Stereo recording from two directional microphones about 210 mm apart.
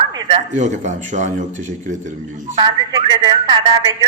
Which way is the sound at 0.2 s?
25° right (ahead or behind).